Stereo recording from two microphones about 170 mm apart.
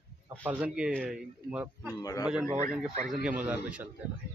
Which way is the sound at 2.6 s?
5° right (ahead or behind).